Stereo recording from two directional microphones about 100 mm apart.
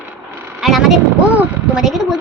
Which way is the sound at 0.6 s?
Centre (ahead or behind).